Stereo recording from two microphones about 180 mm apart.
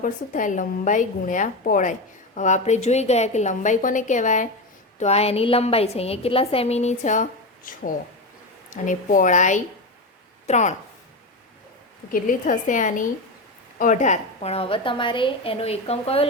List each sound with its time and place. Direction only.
0.0 s a woman's voice: 45° left (ahead or behind)
12.1 s a woman's voice: 45° left (ahead or behind)